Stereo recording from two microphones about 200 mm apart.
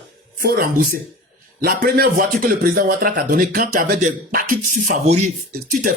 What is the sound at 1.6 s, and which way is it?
Speech, 50° right (ahead or behind).